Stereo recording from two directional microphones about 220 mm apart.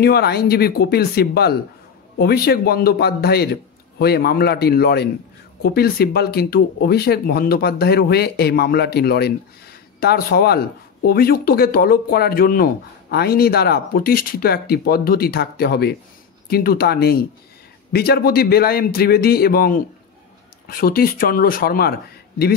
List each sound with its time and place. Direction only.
0.0 s speech: 45° left (ahead or behind)